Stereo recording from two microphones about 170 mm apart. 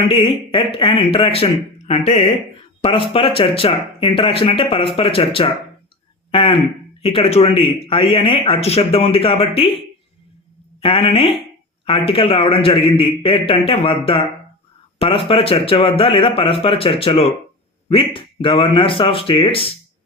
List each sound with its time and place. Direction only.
0.1 s speech: 30° left (ahead or behind)
10.8 s speech: 30° left (ahead or behind)